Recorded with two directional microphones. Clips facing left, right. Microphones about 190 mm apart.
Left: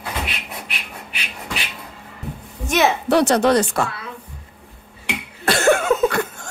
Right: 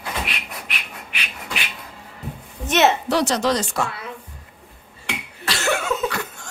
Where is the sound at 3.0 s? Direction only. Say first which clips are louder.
Left 5 dB; 60° left (ahead or behind).